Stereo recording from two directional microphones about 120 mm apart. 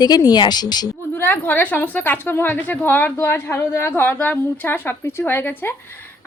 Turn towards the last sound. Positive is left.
turn(degrees=20)  # may be behind; listen again after turning